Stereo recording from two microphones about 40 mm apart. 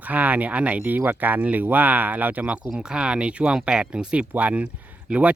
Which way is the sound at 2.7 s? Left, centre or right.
Right.